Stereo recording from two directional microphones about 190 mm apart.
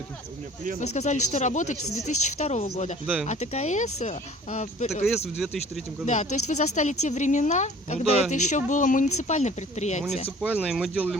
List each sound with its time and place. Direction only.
0.8 s speech: 40° left (ahead or behind)
5.4 s speech: centre (ahead or behind)
6.1 s speech: 40° left (ahead or behind)
10.4 s speech: 5° right (ahead or behind)